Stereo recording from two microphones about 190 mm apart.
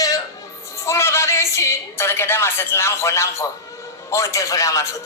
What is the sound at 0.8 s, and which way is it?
A woman's voice, 15° left (ahead or behind).